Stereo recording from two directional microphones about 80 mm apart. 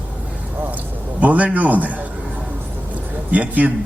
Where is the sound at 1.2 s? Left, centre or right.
Centre.